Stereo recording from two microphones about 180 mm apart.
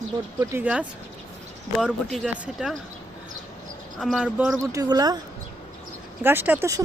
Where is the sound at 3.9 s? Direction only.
Centre (ahead or behind).